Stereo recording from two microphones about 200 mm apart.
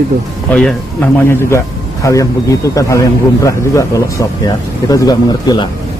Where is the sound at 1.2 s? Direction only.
10° left (ahead or behind).